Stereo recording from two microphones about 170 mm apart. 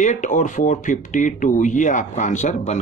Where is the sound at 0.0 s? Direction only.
45° left (ahead or behind).